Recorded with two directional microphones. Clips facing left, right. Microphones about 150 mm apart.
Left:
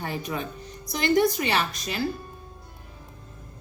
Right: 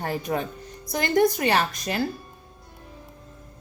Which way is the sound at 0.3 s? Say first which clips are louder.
Right 4 dB; 45° right (ahead or behind).